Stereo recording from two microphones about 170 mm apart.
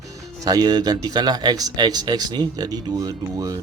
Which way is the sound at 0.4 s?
25° right (ahead or behind).